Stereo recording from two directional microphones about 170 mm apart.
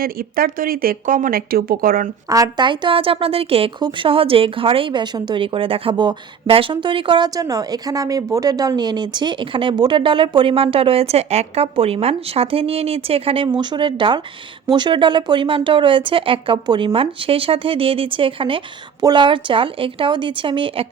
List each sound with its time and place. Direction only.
0.0 s speech: 60° right (ahead or behind)
2.3 s a woman's voice: 25° right (ahead or behind)